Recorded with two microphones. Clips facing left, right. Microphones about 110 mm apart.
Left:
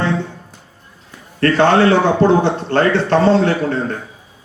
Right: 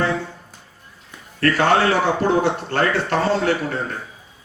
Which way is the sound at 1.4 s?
25° left (ahead or behind).